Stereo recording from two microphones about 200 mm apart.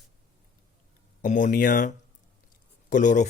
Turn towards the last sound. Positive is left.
turn(degrees=40)  # may be behind; listen again after turning